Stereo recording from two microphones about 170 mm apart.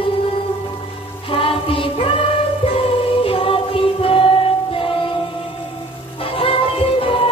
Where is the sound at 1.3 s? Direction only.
30° left (ahead or behind).